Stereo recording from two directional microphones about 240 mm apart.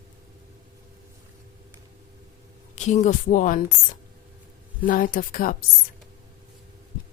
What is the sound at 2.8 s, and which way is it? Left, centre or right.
Speech, left.